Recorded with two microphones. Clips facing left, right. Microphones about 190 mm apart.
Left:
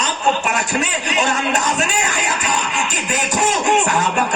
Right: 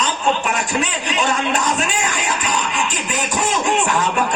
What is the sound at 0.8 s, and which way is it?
Speech, 45° left (ahead or behind).